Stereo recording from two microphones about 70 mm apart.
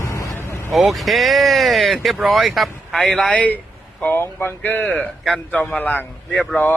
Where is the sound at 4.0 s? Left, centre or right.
Left.